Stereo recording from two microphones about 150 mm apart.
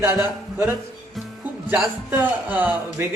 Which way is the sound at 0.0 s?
15° right (ahead or behind).